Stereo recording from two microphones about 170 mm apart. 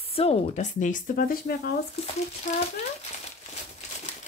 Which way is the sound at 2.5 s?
50° left (ahead or behind).